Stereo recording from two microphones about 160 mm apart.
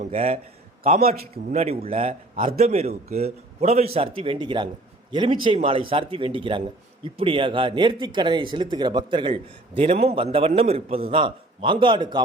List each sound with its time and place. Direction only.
0.0 s a man's voice: 45° right (ahead or behind)
0.9 s a man's voice: 65° right (ahead or behind)
1.5 s speech: 40° right (ahead or behind)